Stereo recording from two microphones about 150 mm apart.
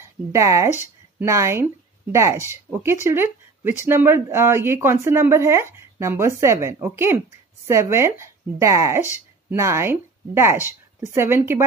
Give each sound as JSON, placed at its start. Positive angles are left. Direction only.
{"t": 0.0, "sound": "speech", "side_deg": -20}